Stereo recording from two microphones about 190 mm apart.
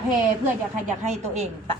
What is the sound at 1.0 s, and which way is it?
Speech, 35° right (ahead or behind).